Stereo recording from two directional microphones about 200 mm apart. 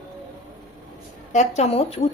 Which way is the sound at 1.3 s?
35° left (ahead or behind).